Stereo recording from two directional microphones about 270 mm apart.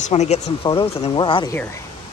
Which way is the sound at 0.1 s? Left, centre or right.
Left.